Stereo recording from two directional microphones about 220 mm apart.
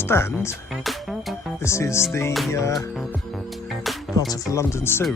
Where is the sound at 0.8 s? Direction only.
Centre (ahead or behind).